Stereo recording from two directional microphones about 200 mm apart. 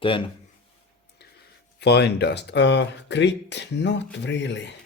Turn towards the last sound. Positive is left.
turn(degrees=60)  # may be behind; listen again after turning